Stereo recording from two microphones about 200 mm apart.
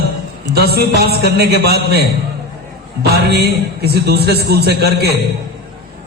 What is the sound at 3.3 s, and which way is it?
A man's voice, 55° right (ahead or behind).